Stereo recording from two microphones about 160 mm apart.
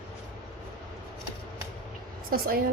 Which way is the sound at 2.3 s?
65° right (ahead or behind).